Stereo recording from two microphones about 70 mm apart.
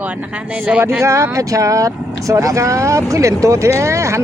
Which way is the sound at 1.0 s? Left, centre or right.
Right.